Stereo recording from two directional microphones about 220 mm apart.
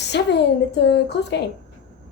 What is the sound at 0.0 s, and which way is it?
Speech, 50° left (ahead or behind).